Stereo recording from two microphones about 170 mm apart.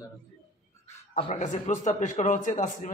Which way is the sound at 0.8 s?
35° left (ahead or behind).